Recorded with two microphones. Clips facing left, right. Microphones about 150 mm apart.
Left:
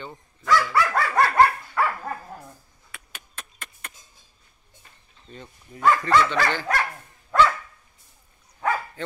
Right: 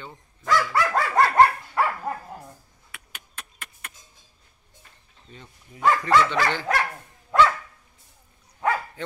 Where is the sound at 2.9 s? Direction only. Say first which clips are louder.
Left 1 dB; 15° right (ahead or behind).